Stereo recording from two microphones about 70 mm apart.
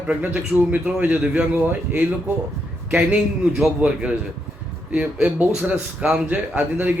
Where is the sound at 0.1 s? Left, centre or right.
Centre.